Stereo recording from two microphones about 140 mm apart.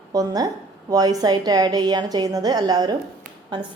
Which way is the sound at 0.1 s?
25° right (ahead or behind).